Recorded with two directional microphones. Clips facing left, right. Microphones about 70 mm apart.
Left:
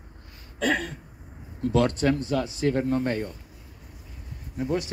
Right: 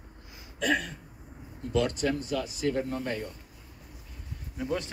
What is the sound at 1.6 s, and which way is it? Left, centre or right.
Speech, left.